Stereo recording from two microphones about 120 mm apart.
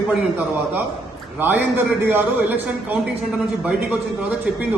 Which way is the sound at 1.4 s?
15° right (ahead or behind).